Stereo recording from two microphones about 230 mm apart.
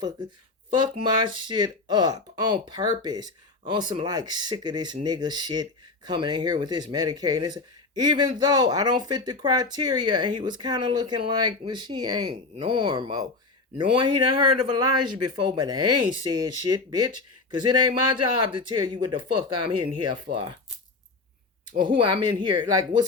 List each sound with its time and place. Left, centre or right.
0.7 s speech: centre
20.3 s speech: right
21.8 s speech: centre